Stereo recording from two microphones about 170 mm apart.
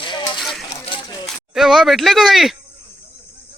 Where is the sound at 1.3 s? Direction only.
Centre (ahead or behind).